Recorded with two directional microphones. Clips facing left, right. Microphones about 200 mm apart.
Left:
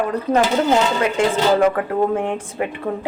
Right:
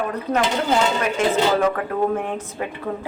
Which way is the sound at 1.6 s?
25° left (ahead or behind).